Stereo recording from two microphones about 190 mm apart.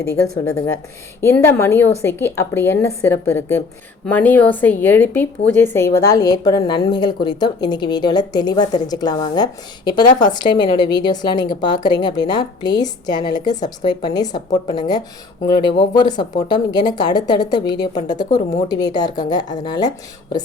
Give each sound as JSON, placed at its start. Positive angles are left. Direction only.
{"t": 0.5, "sound": "a woman's voice", "side_deg": 15}